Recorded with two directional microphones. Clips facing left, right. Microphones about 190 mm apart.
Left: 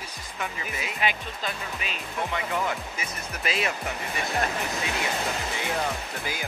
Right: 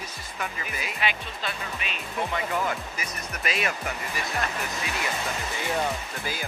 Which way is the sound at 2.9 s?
25° left (ahead or behind).